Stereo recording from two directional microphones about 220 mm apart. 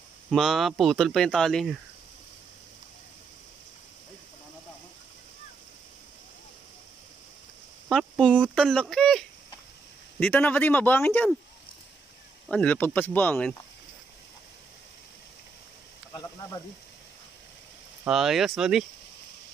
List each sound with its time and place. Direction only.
0.3 s speech: centre (ahead or behind)
7.9 s speech: 5° left (ahead or behind)
12.4 s speech: 5° left (ahead or behind)
16.1 s snake: 15° left (ahead or behind)
18.0 s speech: centre (ahead or behind)